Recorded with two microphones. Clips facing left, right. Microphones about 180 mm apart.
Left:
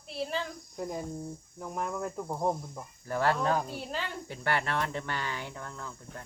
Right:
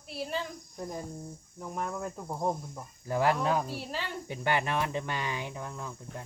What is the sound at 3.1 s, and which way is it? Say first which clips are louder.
Speech: right 1 dB; 15° right (ahead or behind).